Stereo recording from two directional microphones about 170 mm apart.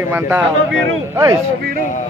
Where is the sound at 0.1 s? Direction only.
10° right (ahead or behind).